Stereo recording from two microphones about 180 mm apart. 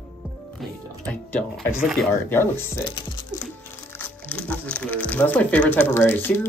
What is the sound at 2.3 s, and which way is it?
Speech, 10° left (ahead or behind).